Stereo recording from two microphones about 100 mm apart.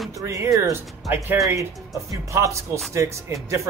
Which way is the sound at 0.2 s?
30° right (ahead or behind).